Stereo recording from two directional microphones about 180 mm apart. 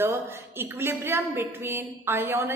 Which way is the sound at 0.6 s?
15° right (ahead or behind).